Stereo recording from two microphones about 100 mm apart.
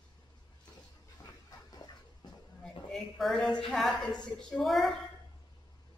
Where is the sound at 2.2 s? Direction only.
45° left (ahead or behind).